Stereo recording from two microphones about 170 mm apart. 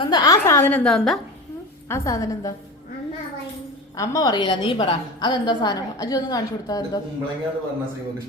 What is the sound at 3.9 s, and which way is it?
A woman's voice, 20° left (ahead or behind).